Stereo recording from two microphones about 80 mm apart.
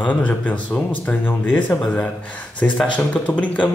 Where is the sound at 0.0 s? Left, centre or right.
Centre.